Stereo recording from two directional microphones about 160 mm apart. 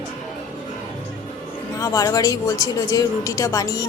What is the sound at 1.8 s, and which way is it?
A woman's voice, 20° left (ahead or behind).